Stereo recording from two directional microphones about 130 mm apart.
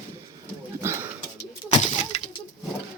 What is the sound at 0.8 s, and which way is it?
Bird, 20° right (ahead or behind).